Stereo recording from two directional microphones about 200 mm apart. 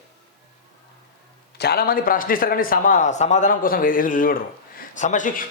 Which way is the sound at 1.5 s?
55° left (ahead or behind).